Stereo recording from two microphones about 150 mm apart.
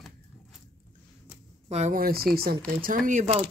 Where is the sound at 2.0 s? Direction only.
80° right.